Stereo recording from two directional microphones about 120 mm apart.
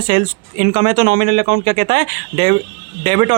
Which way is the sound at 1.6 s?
65° right (ahead or behind).